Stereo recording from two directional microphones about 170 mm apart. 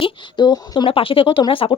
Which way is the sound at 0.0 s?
25° left (ahead or behind).